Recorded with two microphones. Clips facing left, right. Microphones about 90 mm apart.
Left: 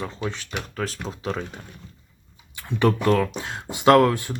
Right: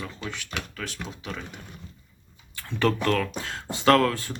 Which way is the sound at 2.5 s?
15° left (ahead or behind).